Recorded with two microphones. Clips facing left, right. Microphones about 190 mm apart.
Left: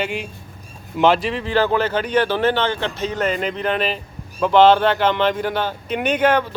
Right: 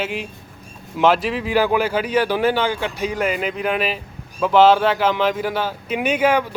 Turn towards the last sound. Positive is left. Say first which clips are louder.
# even
turn(degrees=-10)  # may be behind; listen again after turning